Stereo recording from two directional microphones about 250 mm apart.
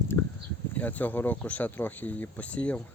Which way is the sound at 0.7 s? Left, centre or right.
Centre.